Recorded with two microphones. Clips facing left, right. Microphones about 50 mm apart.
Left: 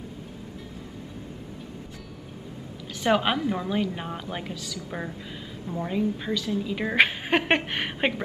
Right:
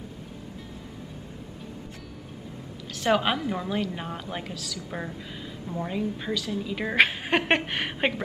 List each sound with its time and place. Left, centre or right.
3.0 s a woman's voice: centre